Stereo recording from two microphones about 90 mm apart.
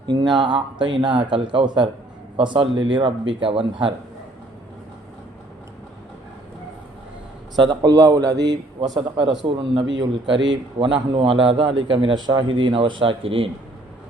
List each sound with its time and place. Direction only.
0.1 s a man's voice: 55° right (ahead or behind); by 3.9 s 75° right (ahead or behind)
7.5 s a man's voice: 55° right (ahead or behind)
9.0 s a man's voice: 75° right (ahead or behind)